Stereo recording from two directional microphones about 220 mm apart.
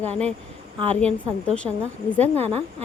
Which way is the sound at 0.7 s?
25° right (ahead or behind).